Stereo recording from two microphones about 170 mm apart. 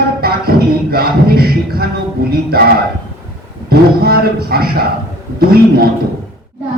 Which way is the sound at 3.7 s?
65° right (ahead or behind).